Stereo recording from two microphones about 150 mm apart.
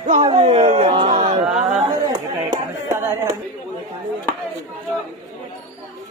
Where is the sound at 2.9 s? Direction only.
15° right (ahead or behind).